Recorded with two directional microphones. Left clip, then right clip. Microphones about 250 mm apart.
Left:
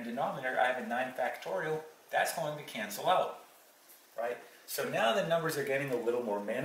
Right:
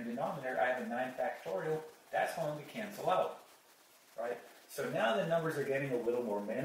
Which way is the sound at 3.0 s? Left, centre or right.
Centre.